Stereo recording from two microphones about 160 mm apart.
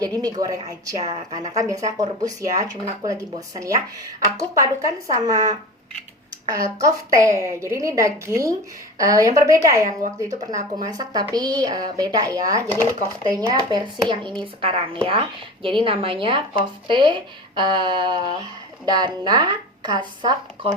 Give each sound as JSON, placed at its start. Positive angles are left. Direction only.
{"t": 0.0, "sound": "a woman's voice", "side_deg": -25}